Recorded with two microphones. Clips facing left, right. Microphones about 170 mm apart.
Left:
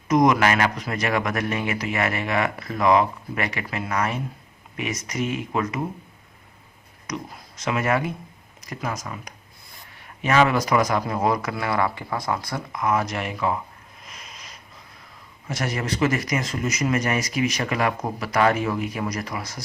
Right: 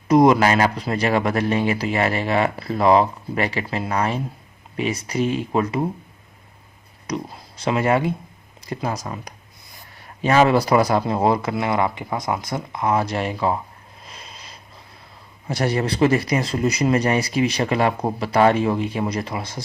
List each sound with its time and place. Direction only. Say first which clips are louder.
0.1 s speech: right 4 dB; 30° right (ahead or behind)
7.1 s speech: right 5 dB; 30° right (ahead or behind)
14.0 s snort: right 2 dB; 30° right (ahead or behind)
15.4 s speech: right 5 dB; 35° right (ahead or behind)